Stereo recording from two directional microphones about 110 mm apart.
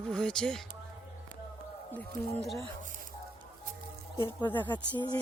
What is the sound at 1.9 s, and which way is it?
Speech, 15° left (ahead or behind).